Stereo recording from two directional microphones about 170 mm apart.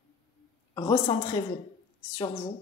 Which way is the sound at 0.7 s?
25° left (ahead or behind).